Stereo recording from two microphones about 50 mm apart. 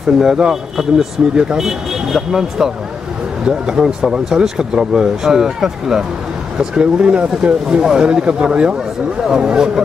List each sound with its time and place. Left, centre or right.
0.2 s speech: centre